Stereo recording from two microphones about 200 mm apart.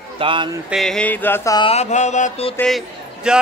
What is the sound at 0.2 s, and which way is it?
Music, 25° right (ahead or behind).